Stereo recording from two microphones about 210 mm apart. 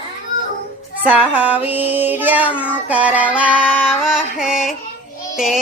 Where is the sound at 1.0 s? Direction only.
10° right (ahead or behind).